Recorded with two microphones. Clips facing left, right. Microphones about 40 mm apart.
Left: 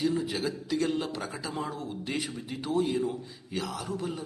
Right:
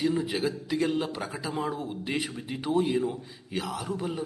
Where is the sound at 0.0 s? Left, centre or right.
Centre.